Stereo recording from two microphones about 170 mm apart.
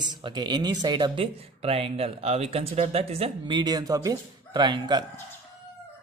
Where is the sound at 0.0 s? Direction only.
25° right (ahead or behind).